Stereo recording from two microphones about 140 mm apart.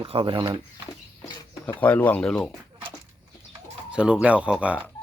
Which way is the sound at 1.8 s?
10° left (ahead or behind).